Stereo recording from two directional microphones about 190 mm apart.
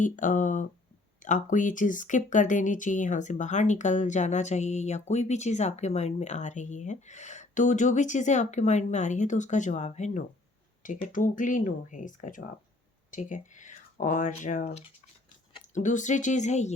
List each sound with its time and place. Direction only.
0.0 s speech: 40° left (ahead or behind)